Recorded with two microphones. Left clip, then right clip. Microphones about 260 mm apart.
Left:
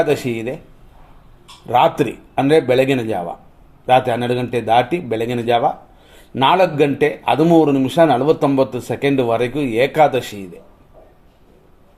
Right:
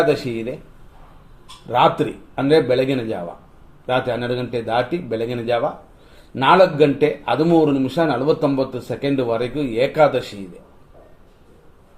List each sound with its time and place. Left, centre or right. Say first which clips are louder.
0.0 s a man's voice: left 1 dB; left
1.6 s a man's voice: left 2 dB; left